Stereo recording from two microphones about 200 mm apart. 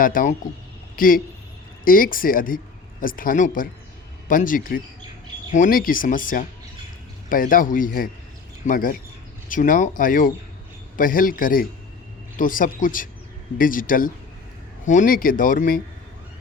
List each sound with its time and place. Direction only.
0.0 s speech: 45° left (ahead or behind)